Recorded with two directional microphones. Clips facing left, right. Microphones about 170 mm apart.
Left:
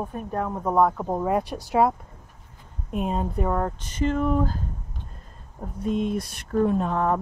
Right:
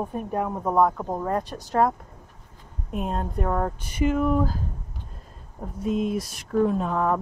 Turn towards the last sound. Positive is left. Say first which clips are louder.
# even
turn(degrees=0)  # may be behind; listen again after turning